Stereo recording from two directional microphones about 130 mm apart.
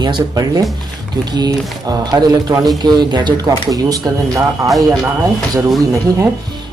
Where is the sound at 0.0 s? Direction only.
30° right (ahead or behind).